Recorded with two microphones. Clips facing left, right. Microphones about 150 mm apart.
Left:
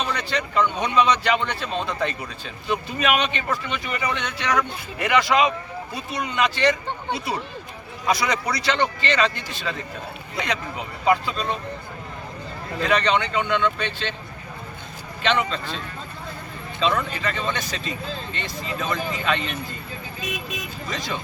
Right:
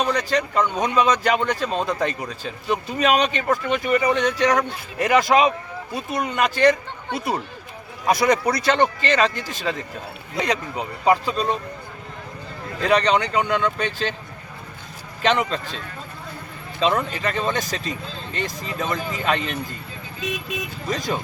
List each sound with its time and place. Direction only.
0.0 s a man's voice: 40° right (ahead or behind)
12.9 s a man's voice: 40° right (ahead or behind)
15.2 s a man's voice: 45° right (ahead or behind)
16.8 s a man's voice: 40° right (ahead or behind)
20.9 s a man's voice: 40° right (ahead or behind)